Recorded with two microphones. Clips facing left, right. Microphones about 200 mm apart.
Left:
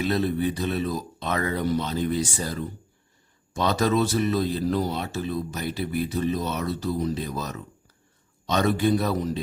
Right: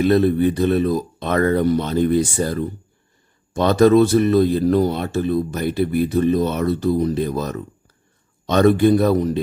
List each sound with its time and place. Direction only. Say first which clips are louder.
0.0 s speech: right 9 dB; 55° right (ahead or behind)